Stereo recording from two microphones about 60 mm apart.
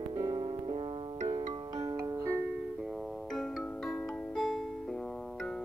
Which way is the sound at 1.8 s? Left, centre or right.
Right.